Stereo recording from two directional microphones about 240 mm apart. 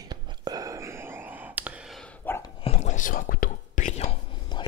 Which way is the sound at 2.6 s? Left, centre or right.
Left.